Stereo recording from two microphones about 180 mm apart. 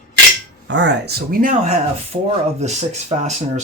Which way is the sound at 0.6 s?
80° right.